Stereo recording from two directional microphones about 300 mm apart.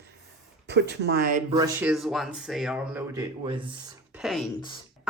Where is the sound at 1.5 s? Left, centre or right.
Centre.